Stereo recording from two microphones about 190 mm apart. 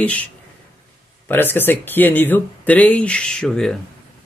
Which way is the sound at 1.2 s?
10° left (ahead or behind).